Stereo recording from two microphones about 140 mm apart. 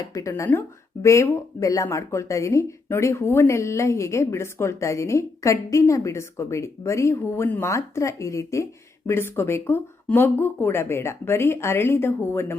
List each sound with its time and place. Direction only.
0.0 s speech: 25° left (ahead or behind)